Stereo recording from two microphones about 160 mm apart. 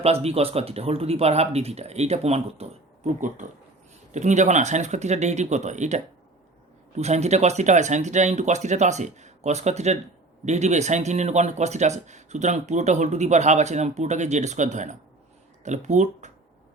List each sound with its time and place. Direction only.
0.0 s speech: 40° right (ahead or behind)